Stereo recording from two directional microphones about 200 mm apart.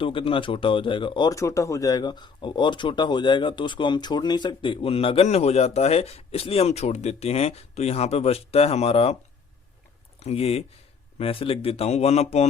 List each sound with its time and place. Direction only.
0.0 s speech: 25° left (ahead or behind)
10.2 s speech: 30° left (ahead or behind)